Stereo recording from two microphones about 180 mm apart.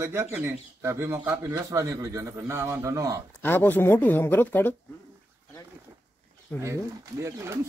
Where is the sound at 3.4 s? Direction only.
10° left (ahead or behind).